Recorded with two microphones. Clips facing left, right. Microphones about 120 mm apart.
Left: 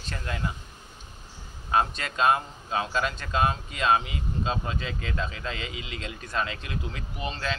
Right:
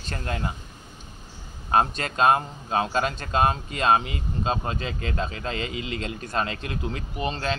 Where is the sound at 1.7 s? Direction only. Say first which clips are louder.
Right 3 dB; 45° right (ahead or behind).